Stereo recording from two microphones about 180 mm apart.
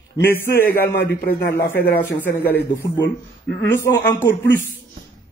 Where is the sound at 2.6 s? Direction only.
65° left (ahead or behind).